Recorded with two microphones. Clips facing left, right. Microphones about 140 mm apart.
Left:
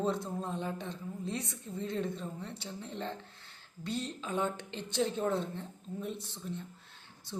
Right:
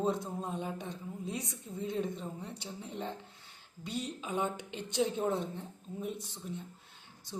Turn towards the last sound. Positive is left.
turn(degrees=-15)  # may be behind; listen again after turning